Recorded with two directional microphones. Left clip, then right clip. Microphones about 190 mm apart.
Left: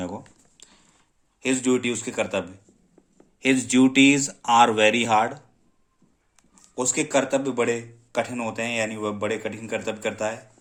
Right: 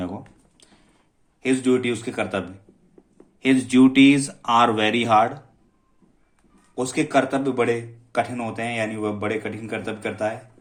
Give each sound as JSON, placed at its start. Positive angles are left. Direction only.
{"t": 1.4, "sound": "speech", "side_deg": 25}
{"t": 6.7, "sound": "speech", "side_deg": 20}